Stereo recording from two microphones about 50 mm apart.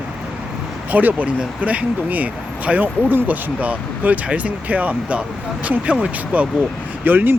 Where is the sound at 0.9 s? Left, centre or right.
Right.